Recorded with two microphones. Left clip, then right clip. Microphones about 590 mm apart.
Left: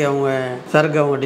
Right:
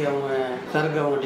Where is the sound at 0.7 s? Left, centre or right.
Left.